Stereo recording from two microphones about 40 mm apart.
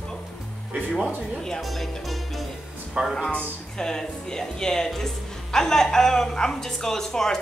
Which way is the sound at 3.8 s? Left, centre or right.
Centre.